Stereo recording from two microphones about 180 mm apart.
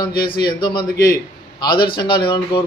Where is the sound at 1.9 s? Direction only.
25° left (ahead or behind).